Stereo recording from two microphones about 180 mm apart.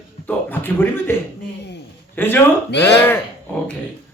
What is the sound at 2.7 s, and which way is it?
Speech, 70° left (ahead or behind).